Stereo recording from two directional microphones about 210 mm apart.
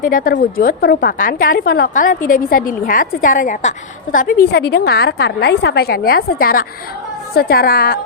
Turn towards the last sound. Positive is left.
turn(degrees=45)  # may be behind; listen again after turning